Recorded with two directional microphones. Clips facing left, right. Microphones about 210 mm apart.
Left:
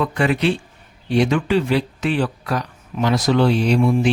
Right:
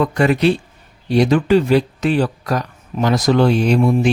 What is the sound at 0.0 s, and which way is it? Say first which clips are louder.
Speech: right 4 dB; 40° right (ahead or behind).